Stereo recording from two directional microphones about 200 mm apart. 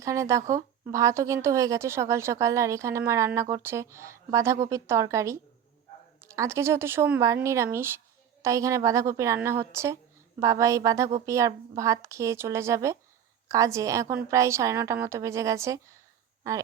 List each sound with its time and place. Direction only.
0.0 s speech: 15° right (ahead or behind)